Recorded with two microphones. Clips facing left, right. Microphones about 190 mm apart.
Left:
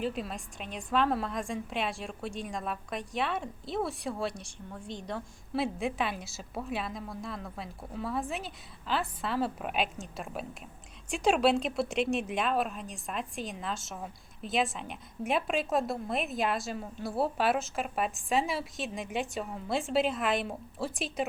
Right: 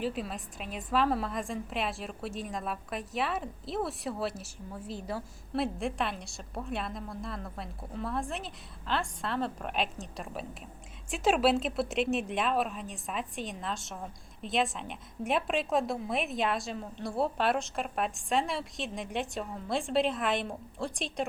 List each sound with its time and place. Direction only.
0.0 s a woman's voice: centre (ahead or behind)